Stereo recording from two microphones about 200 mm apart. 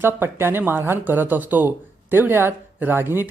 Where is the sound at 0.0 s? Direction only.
10° right (ahead or behind).